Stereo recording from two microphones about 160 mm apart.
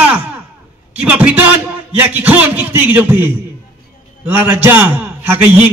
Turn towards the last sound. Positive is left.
turn(degrees=-10)  # may be behind; listen again after turning